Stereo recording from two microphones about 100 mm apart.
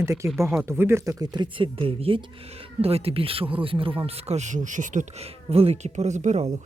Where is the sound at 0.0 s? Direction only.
30° right (ahead or behind).